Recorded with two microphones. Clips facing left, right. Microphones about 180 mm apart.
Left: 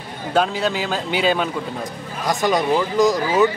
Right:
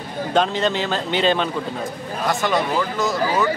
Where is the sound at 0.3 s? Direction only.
5° left (ahead or behind).